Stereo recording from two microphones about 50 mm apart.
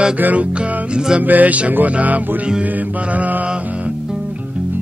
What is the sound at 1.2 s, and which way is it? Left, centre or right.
Music, right.